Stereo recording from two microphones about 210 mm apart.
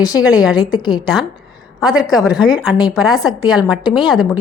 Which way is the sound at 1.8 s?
5° right (ahead or behind).